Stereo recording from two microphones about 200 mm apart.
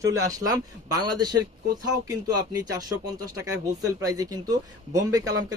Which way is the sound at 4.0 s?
15° right (ahead or behind).